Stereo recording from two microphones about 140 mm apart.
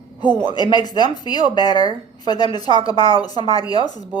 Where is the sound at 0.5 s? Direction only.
30° left (ahead or behind).